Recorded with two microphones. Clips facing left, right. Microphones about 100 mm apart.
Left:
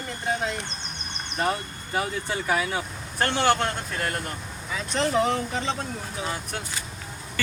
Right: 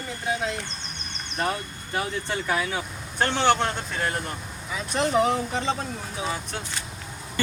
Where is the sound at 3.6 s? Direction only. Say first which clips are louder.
Right 1 dB; 15° right (ahead or behind).